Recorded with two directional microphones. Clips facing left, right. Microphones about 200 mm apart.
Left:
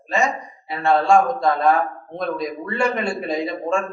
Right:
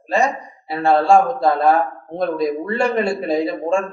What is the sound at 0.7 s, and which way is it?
A man's voice, 35° right (ahead or behind).